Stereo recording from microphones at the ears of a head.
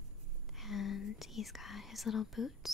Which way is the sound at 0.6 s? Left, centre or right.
Left.